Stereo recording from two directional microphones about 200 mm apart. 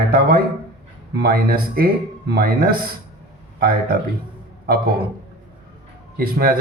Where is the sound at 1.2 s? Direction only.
50° right (ahead or behind).